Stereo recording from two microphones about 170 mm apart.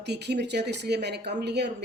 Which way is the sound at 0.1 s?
80° right.